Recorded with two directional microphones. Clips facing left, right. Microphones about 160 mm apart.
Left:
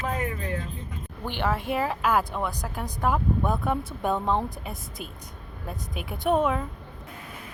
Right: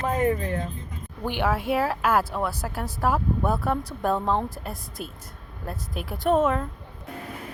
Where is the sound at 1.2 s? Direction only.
10° right (ahead or behind).